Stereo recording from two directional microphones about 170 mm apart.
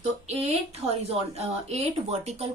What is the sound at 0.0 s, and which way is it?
A woman's voice, 40° right (ahead or behind).